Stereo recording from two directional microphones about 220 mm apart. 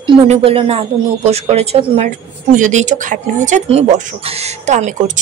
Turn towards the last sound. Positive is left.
turn(degrees=-30)  # may be behind; listen again after turning